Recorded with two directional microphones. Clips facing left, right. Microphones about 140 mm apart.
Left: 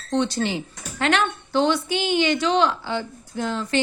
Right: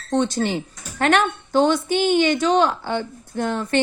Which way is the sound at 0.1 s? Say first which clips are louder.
Right 2 dB; 50° right (ahead or behind).